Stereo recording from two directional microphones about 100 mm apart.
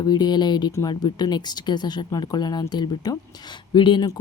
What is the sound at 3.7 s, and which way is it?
Speech, 50° left (ahead or behind).